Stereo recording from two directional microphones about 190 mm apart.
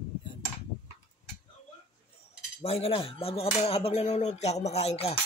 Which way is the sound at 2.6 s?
30° left (ahead or behind).